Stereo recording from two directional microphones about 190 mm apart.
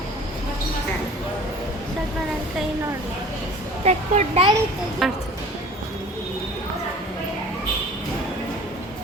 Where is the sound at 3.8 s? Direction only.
35° right (ahead or behind).